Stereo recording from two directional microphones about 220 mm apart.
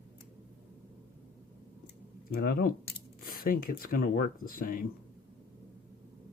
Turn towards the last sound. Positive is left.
turn(degrees=40)  # may be behind; listen again after turning